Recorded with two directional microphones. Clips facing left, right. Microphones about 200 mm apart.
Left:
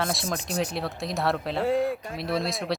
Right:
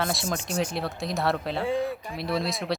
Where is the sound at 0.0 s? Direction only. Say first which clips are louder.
Even; centre (ahead or behind).